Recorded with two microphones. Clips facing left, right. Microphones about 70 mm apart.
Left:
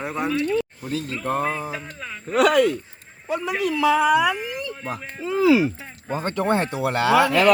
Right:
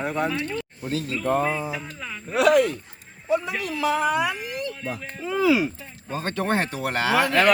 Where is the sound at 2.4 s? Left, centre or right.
Left.